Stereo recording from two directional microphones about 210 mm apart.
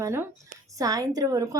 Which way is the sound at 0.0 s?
10° right (ahead or behind).